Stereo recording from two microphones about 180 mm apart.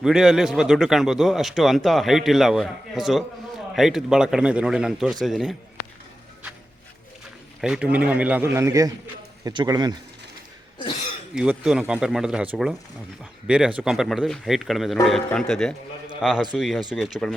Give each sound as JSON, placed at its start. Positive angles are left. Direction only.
{"t": 0.0, "sound": "a man's voice", "side_deg": 0}
{"t": 7.6, "sound": "a man's voice", "side_deg": -5}
{"t": 11.3, "sound": "a man's voice", "side_deg": -5}